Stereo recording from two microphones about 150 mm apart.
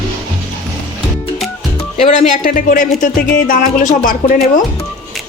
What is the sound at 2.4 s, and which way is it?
Speech, 65° left (ahead or behind).